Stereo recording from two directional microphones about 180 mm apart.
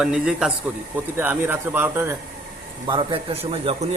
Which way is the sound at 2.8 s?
30° right (ahead or behind).